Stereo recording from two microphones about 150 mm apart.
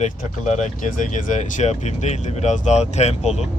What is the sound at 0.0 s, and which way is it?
Speech, 55° left (ahead or behind).